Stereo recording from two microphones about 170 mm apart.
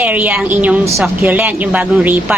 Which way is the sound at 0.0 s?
10° right (ahead or behind).